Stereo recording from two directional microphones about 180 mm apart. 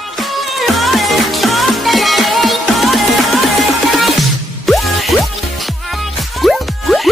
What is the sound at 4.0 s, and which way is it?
Music, centre (ahead or behind).